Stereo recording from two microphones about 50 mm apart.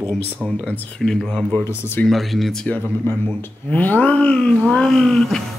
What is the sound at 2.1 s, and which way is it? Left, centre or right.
Music, centre.